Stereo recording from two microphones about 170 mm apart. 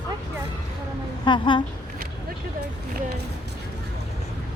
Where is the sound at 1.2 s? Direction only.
30° left (ahead or behind).